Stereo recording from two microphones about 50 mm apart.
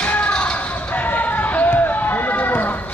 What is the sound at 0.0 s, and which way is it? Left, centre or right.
Music, left.